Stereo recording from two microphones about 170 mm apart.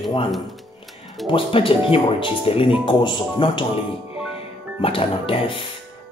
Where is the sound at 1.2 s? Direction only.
30° left (ahead or behind).